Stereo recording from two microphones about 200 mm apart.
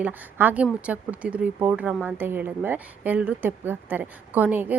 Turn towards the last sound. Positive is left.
turn(degrees=-10)  # may be behind; listen again after turning